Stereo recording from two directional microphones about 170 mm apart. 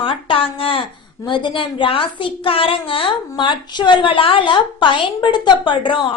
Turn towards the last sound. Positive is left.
turn(degrees=30)  # may be behind; listen again after turning